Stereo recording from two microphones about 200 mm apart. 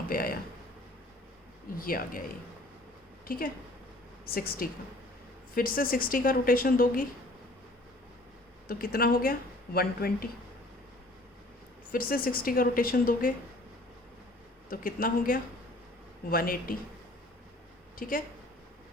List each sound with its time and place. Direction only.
0.1 s a sound: 45° left (ahead or behind)
1.8 s a woman's voice: 45° left (ahead or behind)
3.2 s a woman's voice: 45° left (ahead or behind)
8.6 s a woman's voice: 45° left (ahead or behind)
11.9 s a woman's voice: 45° left (ahead or behind)
14.7 s a woman's voice: 45° left (ahead or behind)
17.9 s speech: 45° left (ahead or behind)